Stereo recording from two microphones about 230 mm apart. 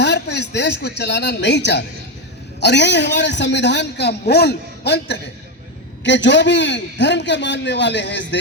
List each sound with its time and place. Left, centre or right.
0.0 s a man's voice: left